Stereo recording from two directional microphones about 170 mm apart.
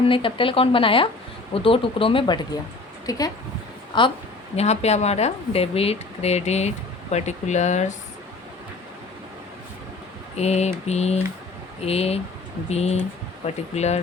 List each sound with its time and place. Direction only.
0.1 s speech: 30° left (ahead or behind)
4.5 s speech: 40° left (ahead or behind)
10.3 s speech: 40° left (ahead or behind)